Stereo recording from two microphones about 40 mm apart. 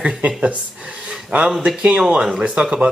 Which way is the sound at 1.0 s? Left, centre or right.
Right.